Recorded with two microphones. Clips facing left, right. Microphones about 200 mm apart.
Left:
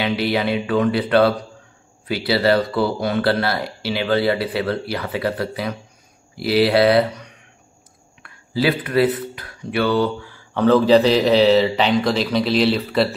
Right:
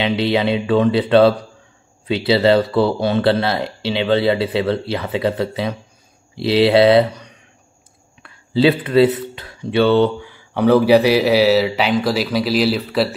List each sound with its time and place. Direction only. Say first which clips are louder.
0.0 s speech: right 3 dB; 25° right (ahead or behind); by 13.1 s 5° right (ahead or behind)